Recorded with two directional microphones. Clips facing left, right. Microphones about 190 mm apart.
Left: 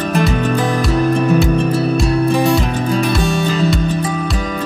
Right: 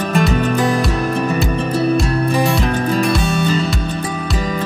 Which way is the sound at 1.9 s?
Centre (ahead or behind).